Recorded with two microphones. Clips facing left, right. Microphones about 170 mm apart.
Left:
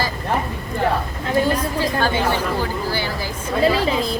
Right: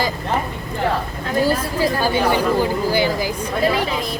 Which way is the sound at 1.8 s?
10° right (ahead or behind).